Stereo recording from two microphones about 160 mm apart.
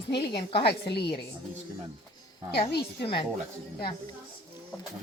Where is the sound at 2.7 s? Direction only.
90° left.